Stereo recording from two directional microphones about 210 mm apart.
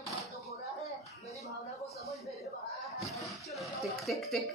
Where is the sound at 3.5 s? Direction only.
Centre (ahead or behind).